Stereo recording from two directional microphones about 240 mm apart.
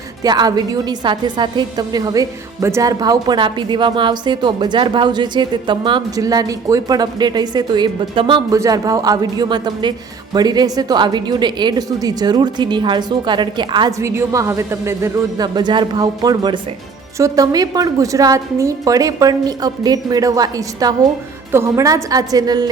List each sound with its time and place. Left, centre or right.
0.2 s a woman's voice: centre